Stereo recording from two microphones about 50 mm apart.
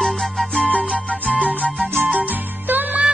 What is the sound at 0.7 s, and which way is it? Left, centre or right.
Music, left.